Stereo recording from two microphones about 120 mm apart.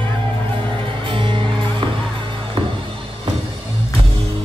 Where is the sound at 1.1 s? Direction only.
45° right (ahead or behind).